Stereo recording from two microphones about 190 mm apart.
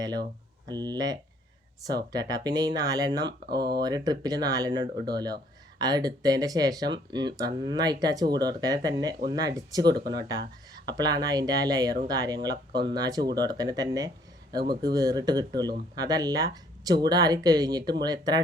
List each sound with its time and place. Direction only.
0.7 s speech: 20° right (ahead or behind)
3.4 s speech: 60° right (ahead or behind)
3.8 s speech: 20° right (ahead or behind)